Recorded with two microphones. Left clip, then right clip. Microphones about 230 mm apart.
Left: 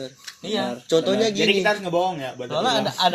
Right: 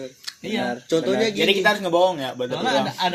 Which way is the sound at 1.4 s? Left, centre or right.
Right.